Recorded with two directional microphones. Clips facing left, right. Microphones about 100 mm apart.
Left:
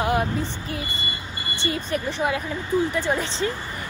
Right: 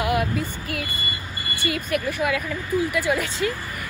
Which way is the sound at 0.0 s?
35° left (ahead or behind).